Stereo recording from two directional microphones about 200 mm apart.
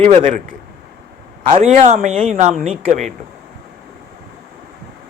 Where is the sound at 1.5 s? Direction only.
35° right (ahead or behind).